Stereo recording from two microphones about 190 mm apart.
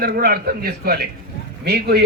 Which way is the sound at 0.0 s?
55° right (ahead or behind).